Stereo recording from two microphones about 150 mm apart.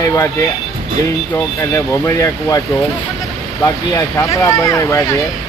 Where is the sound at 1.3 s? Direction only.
20° left (ahead or behind).